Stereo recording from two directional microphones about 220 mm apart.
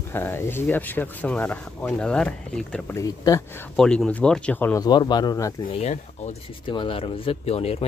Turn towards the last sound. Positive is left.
turn(degrees=25)  # may be behind; listen again after turning